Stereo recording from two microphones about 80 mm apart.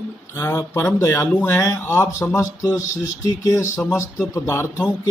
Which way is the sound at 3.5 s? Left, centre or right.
Left.